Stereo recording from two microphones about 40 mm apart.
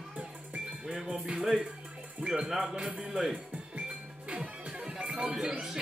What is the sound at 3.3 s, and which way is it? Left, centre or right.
Music, right.